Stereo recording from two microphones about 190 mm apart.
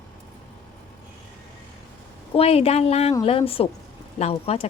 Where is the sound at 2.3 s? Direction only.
30° left (ahead or behind).